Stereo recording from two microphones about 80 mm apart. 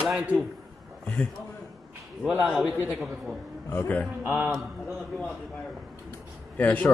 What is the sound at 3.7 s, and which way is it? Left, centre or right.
Speech, centre.